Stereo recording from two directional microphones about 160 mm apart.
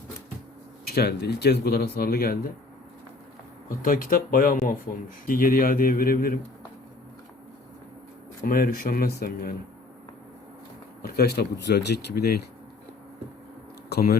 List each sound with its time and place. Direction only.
0.9 s speech: 85° left
3.7 s speech: 60° left (ahead or behind)
8.4 s speech: 60° left (ahead or behind)
11.0 s speech: 80° left
13.9 s speech: 70° left (ahead or behind)